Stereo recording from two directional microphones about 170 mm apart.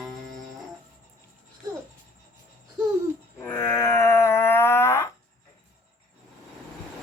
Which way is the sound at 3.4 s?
15° left (ahead or behind).